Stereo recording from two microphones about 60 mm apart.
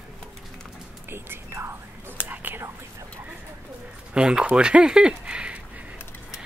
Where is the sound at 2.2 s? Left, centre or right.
Right.